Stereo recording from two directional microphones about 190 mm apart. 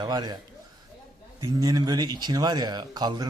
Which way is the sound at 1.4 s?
20° right (ahead or behind).